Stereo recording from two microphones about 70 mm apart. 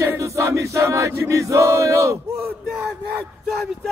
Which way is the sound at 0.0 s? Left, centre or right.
Right.